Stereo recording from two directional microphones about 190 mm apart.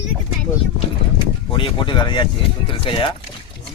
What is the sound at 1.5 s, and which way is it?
Speech, 25° left (ahead or behind).